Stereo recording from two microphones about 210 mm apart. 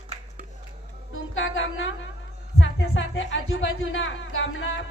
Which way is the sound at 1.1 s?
65° left (ahead or behind).